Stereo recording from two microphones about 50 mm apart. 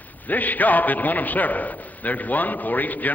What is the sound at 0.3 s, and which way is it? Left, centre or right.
A man's voice, left.